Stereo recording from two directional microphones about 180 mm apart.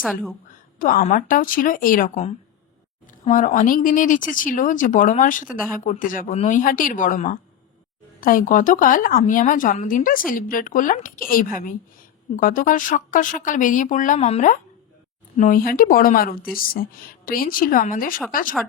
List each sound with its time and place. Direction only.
0.0 s a woman's voice: centre (ahead or behind)
0.8 s speech: 50° left (ahead or behind)
3.2 s speech: 45° left (ahead or behind)
5.5 s a woman's voice: 5° right (ahead or behind)
5.8 s speech: 45° left (ahead or behind)